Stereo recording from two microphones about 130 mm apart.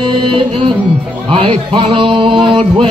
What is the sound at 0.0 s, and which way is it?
Music, 40° right (ahead or behind).